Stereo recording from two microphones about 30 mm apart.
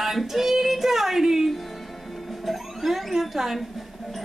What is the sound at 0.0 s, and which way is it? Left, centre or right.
Female singing, centre.